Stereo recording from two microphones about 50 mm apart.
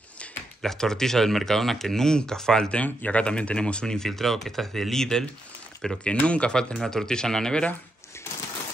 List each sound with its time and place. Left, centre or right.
0.6 s speech: centre
2.7 s speech: left
3.8 s speech: centre
6.2 s speech: left
6.8 s speech: centre